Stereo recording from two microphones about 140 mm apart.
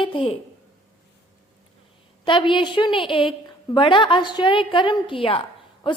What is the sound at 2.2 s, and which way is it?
A woman's voice, 35° left (ahead or behind).